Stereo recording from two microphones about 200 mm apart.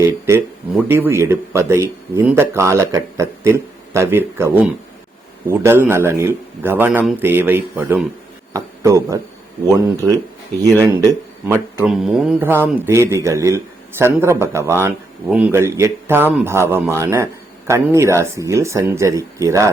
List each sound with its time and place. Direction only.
0.0 s a man's voice: 15° right (ahead or behind)
10.6 s a man's voice: 15° right (ahead or behind)
11.8 s a man's voice: centre (ahead or behind)